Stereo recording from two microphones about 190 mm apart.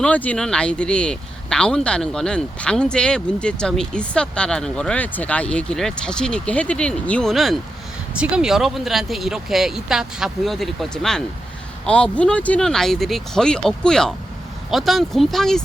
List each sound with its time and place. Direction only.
0.0 s speech: 5° left (ahead or behind)